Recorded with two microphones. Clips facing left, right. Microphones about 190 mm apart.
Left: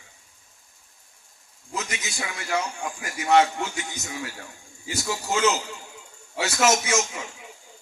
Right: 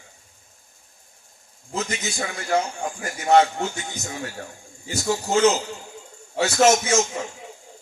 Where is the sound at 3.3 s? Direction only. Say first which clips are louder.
Right 2 dB; 45° right (ahead or behind).